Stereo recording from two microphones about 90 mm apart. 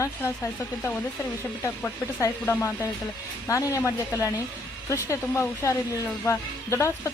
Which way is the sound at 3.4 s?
35° left (ahead or behind).